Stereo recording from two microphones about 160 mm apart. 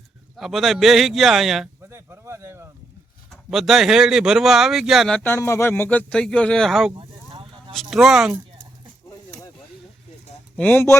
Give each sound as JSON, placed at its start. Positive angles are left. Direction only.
{"t": 0.3, "sound": "speech", "side_deg": 0}
{"t": 1.8, "sound": "a sound", "side_deg": -15}
{"t": 3.2, "sound": "speech", "side_deg": 0}
{"t": 6.9, "sound": "a sound", "side_deg": -35}
{"t": 7.7, "sound": "speech", "side_deg": 0}
{"t": 10.6, "sound": "speech", "side_deg": 10}